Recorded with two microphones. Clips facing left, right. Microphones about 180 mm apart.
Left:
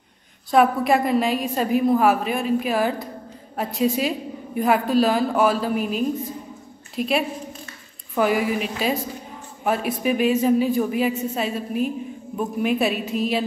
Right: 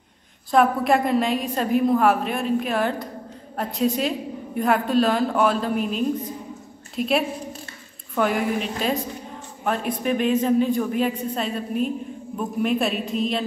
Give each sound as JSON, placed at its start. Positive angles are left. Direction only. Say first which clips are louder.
{"t": 0.5, "sound": "a woman's voice", "louder": "left 1 dB", "side_deg": 0}